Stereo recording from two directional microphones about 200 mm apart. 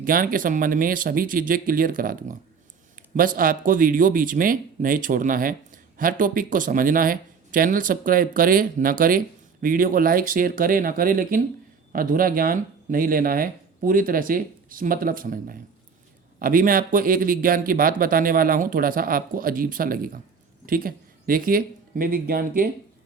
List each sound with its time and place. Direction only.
0.0 s speech: 45° right (ahead or behind)